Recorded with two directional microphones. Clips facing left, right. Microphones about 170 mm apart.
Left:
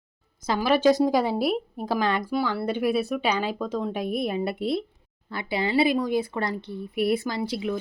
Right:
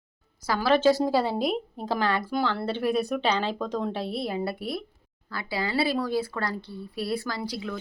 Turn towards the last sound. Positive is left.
turn(degrees=25)  # may be behind; listen again after turning